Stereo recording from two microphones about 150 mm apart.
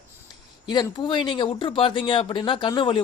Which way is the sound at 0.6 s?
30° left (ahead or behind).